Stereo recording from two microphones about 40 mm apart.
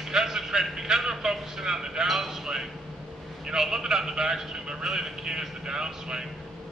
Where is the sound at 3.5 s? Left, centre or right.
Centre.